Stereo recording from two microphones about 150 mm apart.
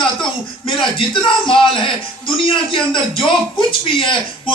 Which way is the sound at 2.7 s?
35° left (ahead or behind).